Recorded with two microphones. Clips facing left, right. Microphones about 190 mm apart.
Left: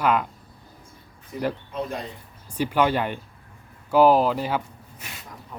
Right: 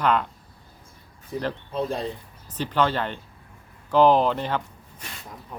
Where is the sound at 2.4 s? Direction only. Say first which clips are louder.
Left 2 dB; 10° left (ahead or behind).